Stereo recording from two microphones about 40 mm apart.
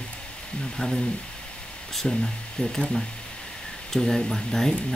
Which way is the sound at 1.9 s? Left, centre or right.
Centre.